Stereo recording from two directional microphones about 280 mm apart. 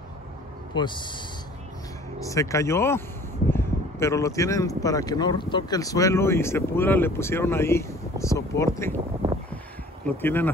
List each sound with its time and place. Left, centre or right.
0.7 s speech: centre
2.2 s speech: centre
10.0 s speech: centre